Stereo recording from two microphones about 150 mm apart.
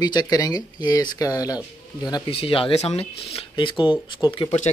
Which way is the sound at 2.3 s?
40° left (ahead or behind).